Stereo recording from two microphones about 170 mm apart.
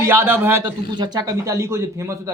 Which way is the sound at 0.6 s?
25° right (ahead or behind).